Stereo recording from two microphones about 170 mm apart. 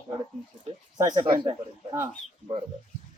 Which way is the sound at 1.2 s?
30° right (ahead or behind).